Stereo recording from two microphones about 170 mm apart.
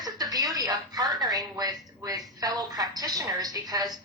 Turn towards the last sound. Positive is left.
turn(degrees=-20)  # may be behind; listen again after turning